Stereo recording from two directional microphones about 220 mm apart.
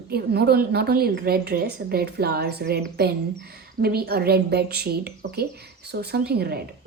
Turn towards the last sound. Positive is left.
turn(degrees=-45)  # may be behind; listen again after turning